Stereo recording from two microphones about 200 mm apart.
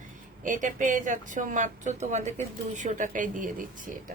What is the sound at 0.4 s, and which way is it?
A woman's voice, 40° right (ahead or behind).